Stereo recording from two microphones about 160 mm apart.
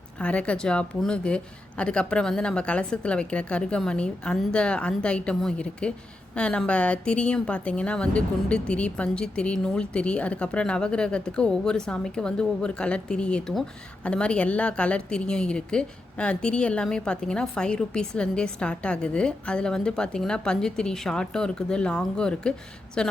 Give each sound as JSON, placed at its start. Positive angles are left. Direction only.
{"t": 0.2, "sound": "a woman's voice", "side_deg": 5}